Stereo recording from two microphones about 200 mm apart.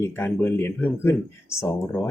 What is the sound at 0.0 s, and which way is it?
Speech, 10° left (ahead or behind).